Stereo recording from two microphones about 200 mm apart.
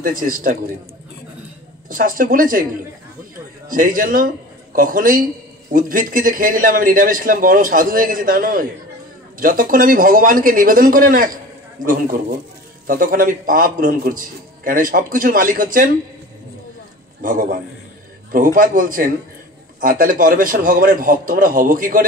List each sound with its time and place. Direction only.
0.2 s a man's voice: 45° right (ahead or behind)
1.9 s a man's voice: 45° right (ahead or behind)
3.6 s a man's voice: 45° right (ahead or behind)
17.2 s a man's voice: 40° right (ahead or behind)